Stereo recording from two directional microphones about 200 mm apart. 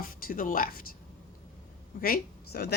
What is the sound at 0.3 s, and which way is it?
Speech, 45° left (ahead or behind).